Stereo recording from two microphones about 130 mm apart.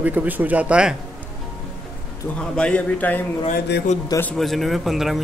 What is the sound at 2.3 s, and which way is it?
Speech, 5° left (ahead or behind).